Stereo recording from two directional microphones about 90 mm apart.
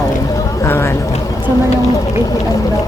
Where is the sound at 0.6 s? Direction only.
30° left (ahead or behind).